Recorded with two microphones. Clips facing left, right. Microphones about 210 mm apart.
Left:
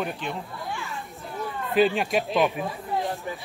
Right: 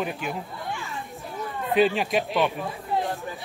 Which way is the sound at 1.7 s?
Centre (ahead or behind).